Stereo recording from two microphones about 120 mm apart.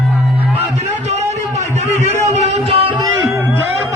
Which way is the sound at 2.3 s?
60° right (ahead or behind).